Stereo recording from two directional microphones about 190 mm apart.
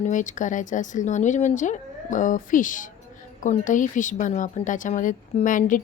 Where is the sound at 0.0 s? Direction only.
40° left (ahead or behind).